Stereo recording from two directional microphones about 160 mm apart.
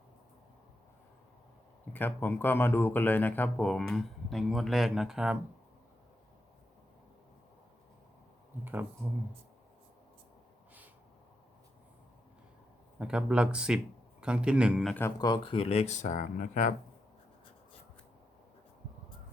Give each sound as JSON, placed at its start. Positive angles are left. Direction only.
{"t": 1.9, "sound": "speech", "side_deg": 10}
{"t": 13.0, "sound": "a man's voice", "side_deg": -5}
{"t": 15.2, "sound": "speech", "side_deg": 30}